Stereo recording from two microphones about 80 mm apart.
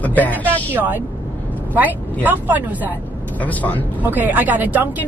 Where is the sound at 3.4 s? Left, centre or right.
Centre.